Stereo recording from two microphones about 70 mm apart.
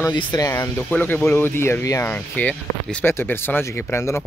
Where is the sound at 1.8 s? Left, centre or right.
Left.